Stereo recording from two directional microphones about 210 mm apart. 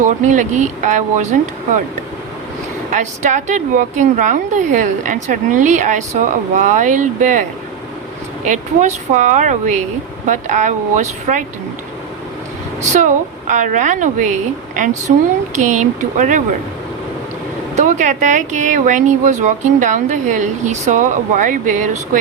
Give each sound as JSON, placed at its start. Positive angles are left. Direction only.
{"t": 0.0, "sound": "speech", "side_deg": -35}
{"t": 2.9, "sound": "speech", "side_deg": -35}
{"t": 8.4, "sound": "speech", "side_deg": -35}
{"t": 12.8, "sound": "speech", "side_deg": -35}
{"t": 15.5, "sound": "speech", "side_deg": -35}
{"t": 17.7, "sound": "speech", "side_deg": -35}